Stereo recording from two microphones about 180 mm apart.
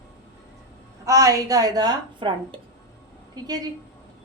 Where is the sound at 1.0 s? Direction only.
20° right (ahead or behind).